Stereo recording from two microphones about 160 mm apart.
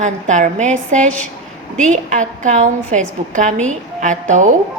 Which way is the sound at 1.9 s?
50° right (ahead or behind).